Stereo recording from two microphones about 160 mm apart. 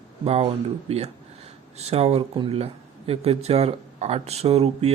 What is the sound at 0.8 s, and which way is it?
Speech, 40° right (ahead or behind).